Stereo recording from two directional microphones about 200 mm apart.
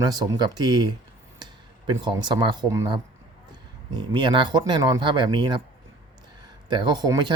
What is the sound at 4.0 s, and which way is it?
Speech, 20° right (ahead or behind).